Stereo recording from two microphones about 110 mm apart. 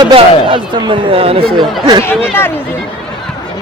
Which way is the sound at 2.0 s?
20° left (ahead or behind).